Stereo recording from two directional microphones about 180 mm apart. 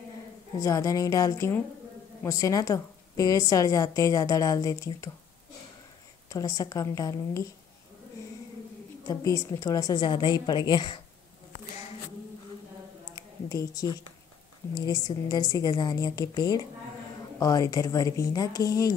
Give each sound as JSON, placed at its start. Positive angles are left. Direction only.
{"t": 0.6, "sound": "a woman's voice", "side_deg": 15}
{"t": 6.2, "sound": "a woman's voice", "side_deg": 20}
{"t": 9.0, "sound": "a woman's voice", "side_deg": 20}
{"t": 13.1, "sound": "a sound", "side_deg": 20}
{"t": 14.7, "sound": "a woman's voice", "side_deg": 25}